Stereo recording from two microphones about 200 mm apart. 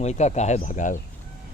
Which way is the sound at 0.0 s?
35° left (ahead or behind).